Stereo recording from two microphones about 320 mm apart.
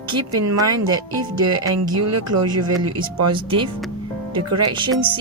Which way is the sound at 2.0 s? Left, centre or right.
Right.